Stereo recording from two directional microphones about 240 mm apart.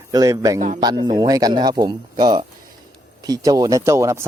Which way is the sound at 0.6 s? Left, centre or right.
Right.